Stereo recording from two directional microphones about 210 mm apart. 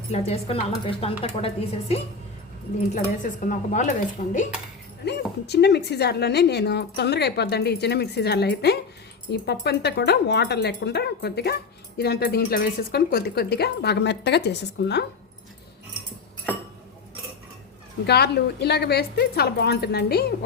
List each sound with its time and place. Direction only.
0.1 s speech: 30° left (ahead or behind)
3.5 s speech: 35° left (ahead or behind)
5.0 s a woman's voice: 50° left (ahead or behind)
18.0 s a woman's voice: 50° left (ahead or behind)